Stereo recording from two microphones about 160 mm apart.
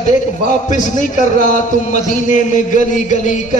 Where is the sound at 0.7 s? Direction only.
50° left (ahead or behind).